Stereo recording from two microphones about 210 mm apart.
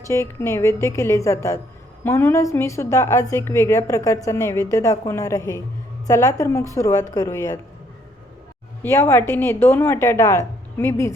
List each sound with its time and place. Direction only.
0.1 s a woman's voice: 15° left (ahead or behind)
8.8 s a woman's voice: 10° left (ahead or behind)